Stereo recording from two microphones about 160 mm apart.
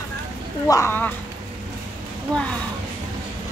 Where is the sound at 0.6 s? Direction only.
15° left (ahead or behind).